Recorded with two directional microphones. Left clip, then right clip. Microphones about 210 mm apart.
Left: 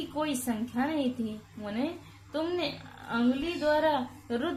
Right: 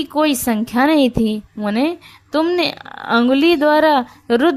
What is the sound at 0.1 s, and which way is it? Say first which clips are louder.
A woman's voice: right 16 dB; 50° right (ahead or behind).